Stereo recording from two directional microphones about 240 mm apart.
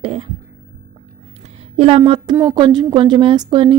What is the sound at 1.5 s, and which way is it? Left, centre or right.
A woman's voice, right.